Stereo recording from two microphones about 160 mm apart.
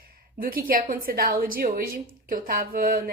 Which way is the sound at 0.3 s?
65° right (ahead or behind).